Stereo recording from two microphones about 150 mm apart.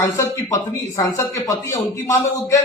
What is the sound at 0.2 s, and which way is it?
Speech, 20° left (ahead or behind).